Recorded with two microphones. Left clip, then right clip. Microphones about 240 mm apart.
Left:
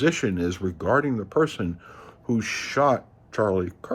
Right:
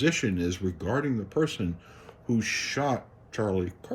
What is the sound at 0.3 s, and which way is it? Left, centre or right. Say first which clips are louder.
Speech: left 3 dB; centre.